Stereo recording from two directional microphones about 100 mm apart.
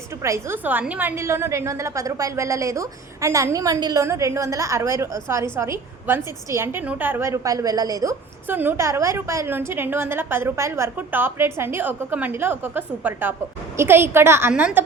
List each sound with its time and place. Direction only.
0.2 s a woman's voice: 30° right (ahead or behind)
1.2 s a woman's voice: 30° right (ahead or behind)
4.0 s a woman's voice: 30° right (ahead or behind)
8.4 s a woman's voice: 20° right (ahead or behind)